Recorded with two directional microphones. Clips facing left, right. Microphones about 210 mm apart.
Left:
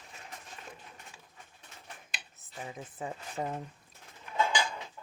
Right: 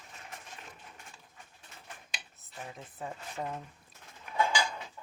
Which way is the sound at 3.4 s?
15° left (ahead or behind).